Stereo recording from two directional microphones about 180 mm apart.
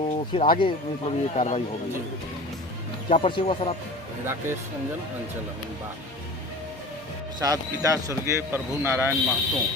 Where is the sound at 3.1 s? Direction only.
30° left (ahead or behind).